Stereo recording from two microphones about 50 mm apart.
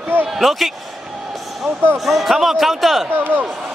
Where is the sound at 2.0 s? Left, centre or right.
Centre.